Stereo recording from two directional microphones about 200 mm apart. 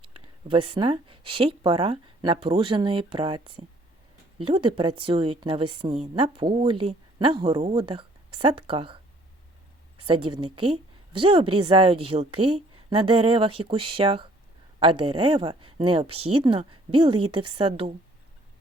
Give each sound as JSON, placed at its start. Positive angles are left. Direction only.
{"t": 0.0, "sound": "a woman's voice", "side_deg": -25}
{"t": 10.1, "sound": "a woman's voice", "side_deg": -25}
{"t": 16.0, "sound": "speech", "side_deg": -90}
{"t": 16.4, "sound": "a woman's voice", "side_deg": -25}